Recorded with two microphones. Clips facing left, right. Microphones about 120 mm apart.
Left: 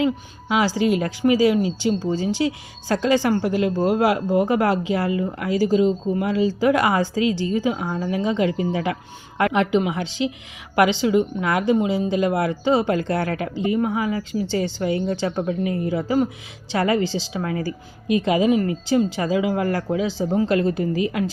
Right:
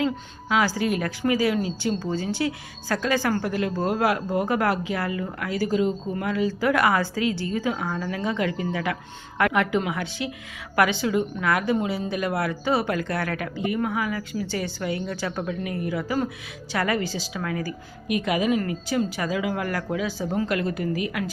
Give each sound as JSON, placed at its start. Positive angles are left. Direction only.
{"t": 0.0, "sound": "speech", "side_deg": 20}